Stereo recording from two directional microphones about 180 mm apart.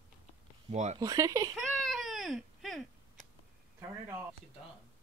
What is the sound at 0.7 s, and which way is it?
Speech, 40° right (ahead or behind).